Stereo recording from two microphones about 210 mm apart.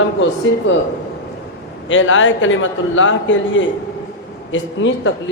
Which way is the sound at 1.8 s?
65° left (ahead or behind).